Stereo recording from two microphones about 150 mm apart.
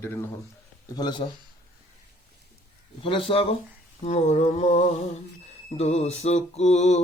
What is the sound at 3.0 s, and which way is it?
Speech, 35° left (ahead or behind).